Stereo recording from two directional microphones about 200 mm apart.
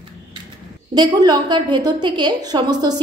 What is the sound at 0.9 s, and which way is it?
A woman's voice, 20° right (ahead or behind).